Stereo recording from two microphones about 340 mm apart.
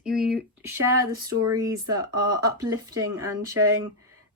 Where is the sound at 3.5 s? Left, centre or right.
Right.